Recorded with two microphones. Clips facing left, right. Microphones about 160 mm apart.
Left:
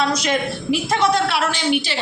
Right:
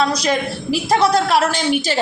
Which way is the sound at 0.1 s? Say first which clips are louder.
Right 1 dB; 35° right (ahead or behind).